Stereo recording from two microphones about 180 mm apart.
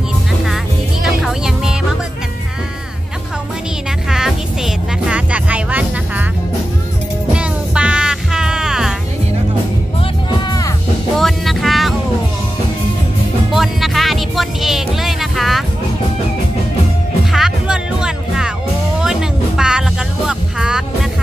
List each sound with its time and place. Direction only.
1.0 s music: 5° right (ahead or behind)
4.1 s music: 5° right (ahead or behind)
7.3 s music: 5° right (ahead or behind)
10.4 s music: 20° left (ahead or behind)
11.1 s music: centre (ahead or behind)
13.5 s music: centre (ahead or behind)
17.3 s music: 5° right (ahead or behind)